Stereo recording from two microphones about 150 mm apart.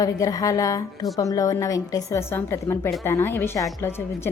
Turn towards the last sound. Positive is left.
turn(degrees=15)  # may be behind; listen again after turning